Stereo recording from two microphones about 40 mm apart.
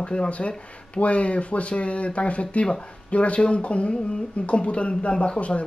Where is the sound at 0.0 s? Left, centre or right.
Left.